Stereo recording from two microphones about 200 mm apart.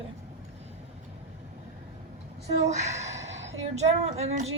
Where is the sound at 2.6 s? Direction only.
35° right (ahead or behind).